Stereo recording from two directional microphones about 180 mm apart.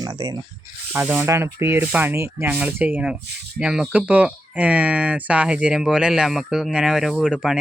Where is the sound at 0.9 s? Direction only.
10° right (ahead or behind).